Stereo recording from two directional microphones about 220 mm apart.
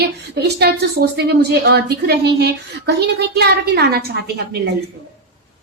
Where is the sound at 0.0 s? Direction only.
45° right (ahead or behind).